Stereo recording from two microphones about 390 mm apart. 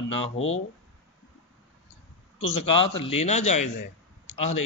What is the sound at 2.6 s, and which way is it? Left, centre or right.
Speech, centre.